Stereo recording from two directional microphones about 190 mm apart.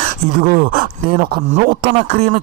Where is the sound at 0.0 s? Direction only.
50° right (ahead or behind).